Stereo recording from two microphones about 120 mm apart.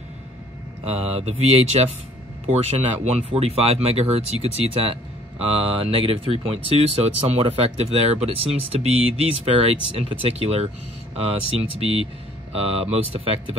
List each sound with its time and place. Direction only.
0.8 s speech: 55° right (ahead or behind)
3.3 s speech: 55° right (ahead or behind)
11.7 s speech: 55° right (ahead or behind)